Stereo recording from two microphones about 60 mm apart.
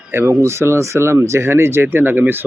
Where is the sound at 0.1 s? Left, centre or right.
Right.